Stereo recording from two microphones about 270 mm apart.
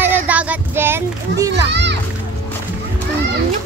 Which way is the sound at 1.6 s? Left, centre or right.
Right.